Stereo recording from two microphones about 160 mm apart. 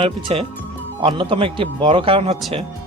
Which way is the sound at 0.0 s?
35° right (ahead or behind).